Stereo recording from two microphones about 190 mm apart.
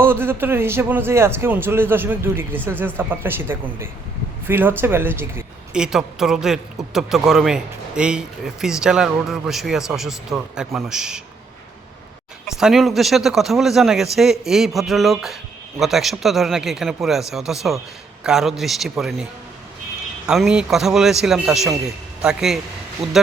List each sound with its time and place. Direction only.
0.0 s a man's voice: 10° right (ahead or behind)
12.5 s a man's voice: 5° right (ahead or behind)